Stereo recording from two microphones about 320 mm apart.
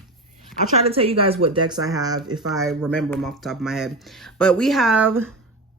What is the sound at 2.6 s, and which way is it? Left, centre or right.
Speech, centre.